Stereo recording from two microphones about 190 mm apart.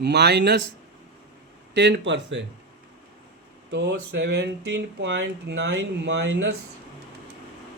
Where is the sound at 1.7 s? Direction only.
70° right (ahead or behind).